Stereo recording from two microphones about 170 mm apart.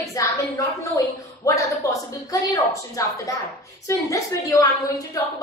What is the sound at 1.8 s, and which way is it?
A woman's voice, 20° left (ahead or behind).